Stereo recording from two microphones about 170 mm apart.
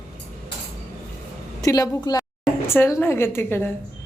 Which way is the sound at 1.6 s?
20° left (ahead or behind).